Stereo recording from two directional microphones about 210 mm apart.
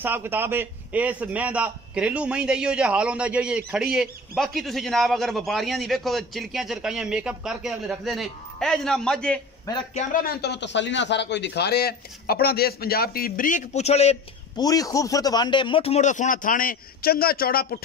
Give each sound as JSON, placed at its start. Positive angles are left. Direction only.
{"t": 0.0, "sound": "a man's voice", "side_deg": -10}
{"t": 9.9, "sound": "a man's voice", "side_deg": 45}
{"t": 14.6, "sound": "a man's voice", "side_deg": 15}